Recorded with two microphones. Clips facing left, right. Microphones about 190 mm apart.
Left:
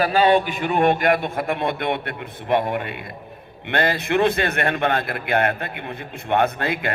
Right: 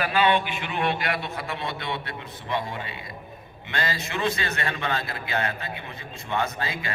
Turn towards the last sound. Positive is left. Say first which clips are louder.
# left 8 dB
turn(degrees=60)  # may be behind; listen again after turning